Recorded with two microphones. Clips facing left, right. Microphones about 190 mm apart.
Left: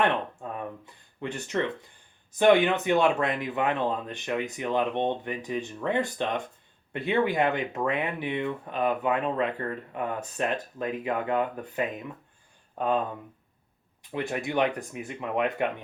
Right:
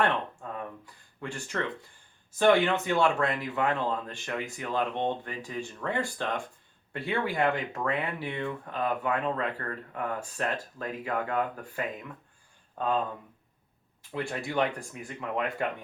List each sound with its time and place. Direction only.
0.5 s speech: 20° left (ahead or behind)
14.1 s speech: 15° left (ahead or behind)